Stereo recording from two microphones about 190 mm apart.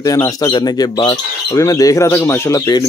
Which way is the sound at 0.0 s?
15° left (ahead or behind).